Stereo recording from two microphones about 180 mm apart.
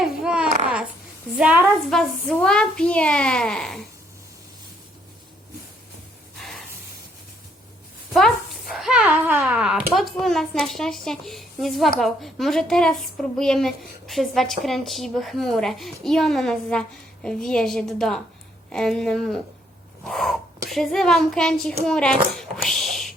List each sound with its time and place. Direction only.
0.0 s babbling: 5° right (ahead or behind)
1.4 s speech: 5° right (ahead or behind)
8.1 s a sound: centre (ahead or behind)
9.9 s speech: centre (ahead or behind)